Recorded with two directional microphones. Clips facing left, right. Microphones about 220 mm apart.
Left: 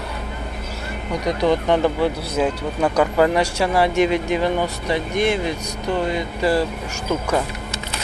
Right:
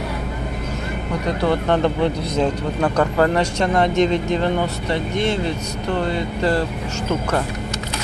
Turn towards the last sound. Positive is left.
turn(degrees=10)  # may be behind; listen again after turning